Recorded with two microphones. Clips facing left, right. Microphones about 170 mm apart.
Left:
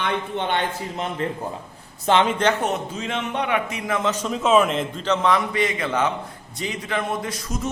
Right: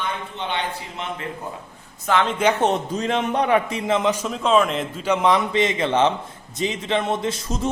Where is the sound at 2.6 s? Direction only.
35° right (ahead or behind).